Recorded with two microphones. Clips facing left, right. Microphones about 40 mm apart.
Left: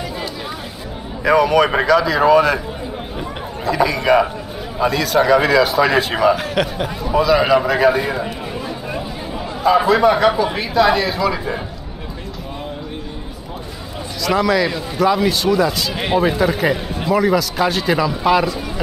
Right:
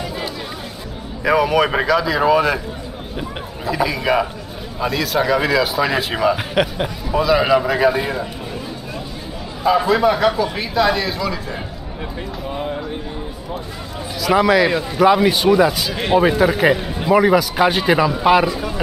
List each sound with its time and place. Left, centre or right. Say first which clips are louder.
1.2 s a man's voice: left 2 dB; centre
3.6 s a man's voice: left 3 dB; centre
6.3 s a man's voice: even; centre
9.8 s a man's voice: left 2 dB; centre
14.2 s a man's voice: right 2 dB; centre
15.9 s speech: right 2 dB; centre
16.2 s a man's voice: right 2 dB; centre